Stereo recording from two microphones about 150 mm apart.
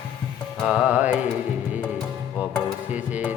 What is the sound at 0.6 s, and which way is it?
Music, 5° right (ahead or behind).